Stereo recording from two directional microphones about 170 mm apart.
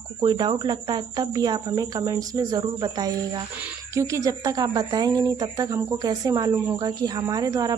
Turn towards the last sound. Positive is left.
turn(degrees=-20)  # may be behind; listen again after turning